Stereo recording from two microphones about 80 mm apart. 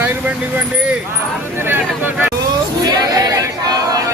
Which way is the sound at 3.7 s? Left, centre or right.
Right.